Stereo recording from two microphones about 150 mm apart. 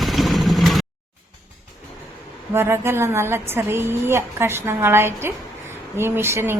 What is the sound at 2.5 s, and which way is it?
A woman's voice, 15° right (ahead or behind).